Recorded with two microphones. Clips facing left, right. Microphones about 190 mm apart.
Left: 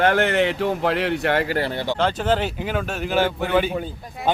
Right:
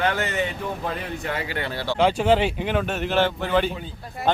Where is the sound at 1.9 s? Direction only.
5° right (ahead or behind).